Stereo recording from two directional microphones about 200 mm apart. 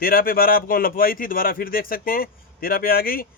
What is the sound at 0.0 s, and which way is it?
Speech, 45° left (ahead or behind).